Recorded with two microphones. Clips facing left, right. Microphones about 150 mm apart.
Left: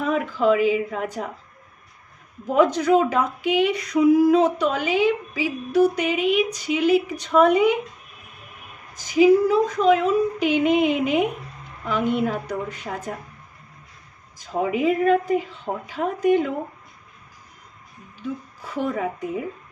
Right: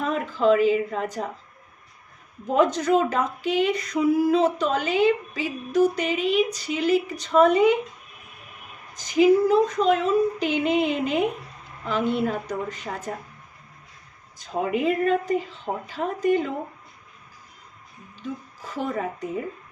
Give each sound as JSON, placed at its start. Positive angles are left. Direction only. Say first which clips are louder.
{"t": 0.0, "sound": "speech", "louder": "left 1 dB", "side_deg": 5}
{"t": 2.6, "sound": "speech", "louder": "left 3 dB", "side_deg": 5}
{"t": 9.0, "sound": "speech", "louder": "left 2 dB", "side_deg": 10}
{"t": 14.3, "sound": "speech", "louder": "left 2 dB", "side_deg": 5}
{"t": 18.7, "sound": "speech", "louder": "left 3 dB", "side_deg": 5}